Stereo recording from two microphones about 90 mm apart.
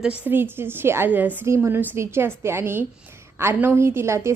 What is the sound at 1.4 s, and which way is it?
A woman's voice, 30° right (ahead or behind).